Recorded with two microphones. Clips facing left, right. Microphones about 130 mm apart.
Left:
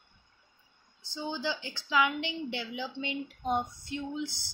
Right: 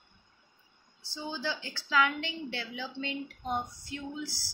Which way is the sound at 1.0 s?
15° left (ahead or behind).